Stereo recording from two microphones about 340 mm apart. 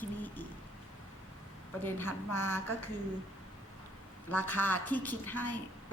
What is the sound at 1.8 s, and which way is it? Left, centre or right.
Speech, centre.